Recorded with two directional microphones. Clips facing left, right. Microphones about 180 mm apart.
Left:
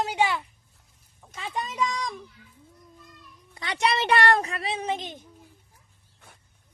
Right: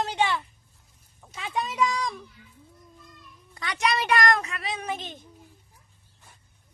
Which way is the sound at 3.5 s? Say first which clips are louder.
Left 1 dB; 25° left (ahead or behind).